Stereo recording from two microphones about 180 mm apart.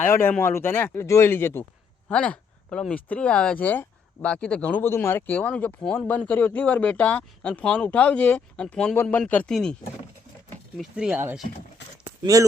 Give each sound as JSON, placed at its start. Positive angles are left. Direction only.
{"t": 0.1, "sound": "speech", "side_deg": 10}
{"t": 10.8, "sound": "speech", "side_deg": -5}
{"t": 12.0, "sound": "a sound", "side_deg": -20}